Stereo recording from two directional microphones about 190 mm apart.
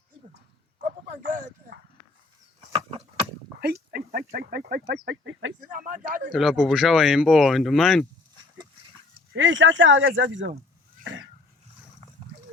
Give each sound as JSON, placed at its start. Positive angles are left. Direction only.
{"t": 3.6, "sound": "a sound", "side_deg": -55}
{"t": 4.3, "sound": "speech", "side_deg": -50}
{"t": 5.0, "sound": "speech", "side_deg": -80}
{"t": 5.5, "sound": "speech", "side_deg": -45}
{"t": 6.3, "sound": "speech", "side_deg": 0}
{"t": 9.3, "sound": "speech", "side_deg": -80}
{"t": 11.0, "sound": "a sound", "side_deg": -90}